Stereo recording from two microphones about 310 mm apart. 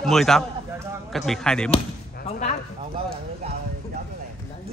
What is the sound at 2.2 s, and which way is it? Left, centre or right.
Speech, left.